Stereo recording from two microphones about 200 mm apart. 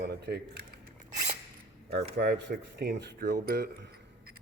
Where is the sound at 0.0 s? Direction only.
55° right (ahead or behind).